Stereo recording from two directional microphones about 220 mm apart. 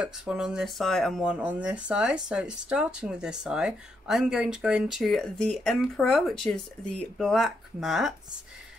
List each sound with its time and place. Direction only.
0.0 s speech: 5° right (ahead or behind)